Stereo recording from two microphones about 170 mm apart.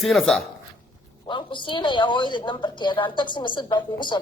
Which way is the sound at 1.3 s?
30° left (ahead or behind).